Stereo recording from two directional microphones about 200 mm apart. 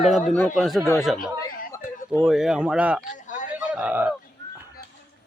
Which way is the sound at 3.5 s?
5° right (ahead or behind).